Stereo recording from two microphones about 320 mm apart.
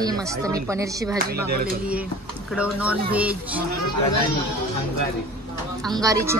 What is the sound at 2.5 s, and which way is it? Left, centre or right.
Speech, centre.